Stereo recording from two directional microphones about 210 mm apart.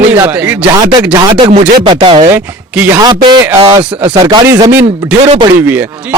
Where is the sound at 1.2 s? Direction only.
20° right (ahead or behind).